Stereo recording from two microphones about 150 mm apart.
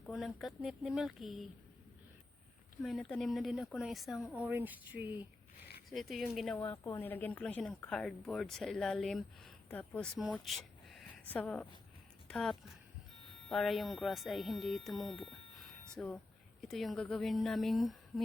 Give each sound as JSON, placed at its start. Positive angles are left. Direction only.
{"t": 0.0, "sound": "speech", "side_deg": 0}
{"t": 2.8, "sound": "speech", "side_deg": 5}
{"t": 5.9, "sound": "speech", "side_deg": 0}
{"t": 6.6, "sound": "a woman's voice", "side_deg": 25}
{"t": 6.9, "sound": "speech", "side_deg": 15}
{"t": 10.3, "sound": "a sound", "side_deg": 0}
{"t": 11.3, "sound": "speech", "side_deg": 5}